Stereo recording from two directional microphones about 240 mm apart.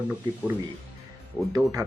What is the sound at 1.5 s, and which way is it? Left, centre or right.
Speech, centre.